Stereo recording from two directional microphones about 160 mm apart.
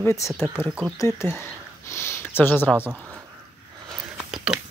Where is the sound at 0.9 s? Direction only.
15° left (ahead or behind).